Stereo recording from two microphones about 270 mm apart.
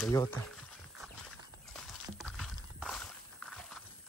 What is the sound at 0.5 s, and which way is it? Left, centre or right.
Wild animals, centre.